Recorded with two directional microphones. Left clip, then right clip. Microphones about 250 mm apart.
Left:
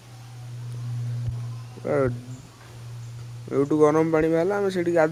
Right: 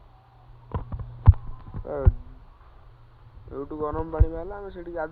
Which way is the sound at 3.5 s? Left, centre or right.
Centre.